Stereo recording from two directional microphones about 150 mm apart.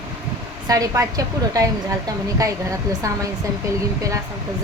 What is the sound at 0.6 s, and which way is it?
A woman's voice, 25° right (ahead or behind).